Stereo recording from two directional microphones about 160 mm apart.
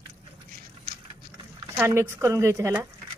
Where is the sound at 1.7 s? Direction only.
15° right (ahead or behind).